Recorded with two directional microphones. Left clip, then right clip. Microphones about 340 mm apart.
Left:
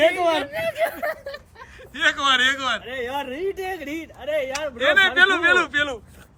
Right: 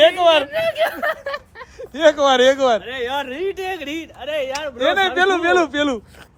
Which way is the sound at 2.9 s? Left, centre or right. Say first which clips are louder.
Right 4 dB; centre.